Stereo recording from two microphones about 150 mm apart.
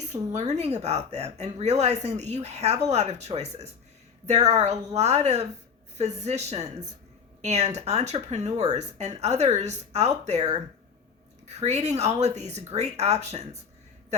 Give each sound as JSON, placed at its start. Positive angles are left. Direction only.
{"t": 0.3, "sound": "a woman's voice", "side_deg": -50}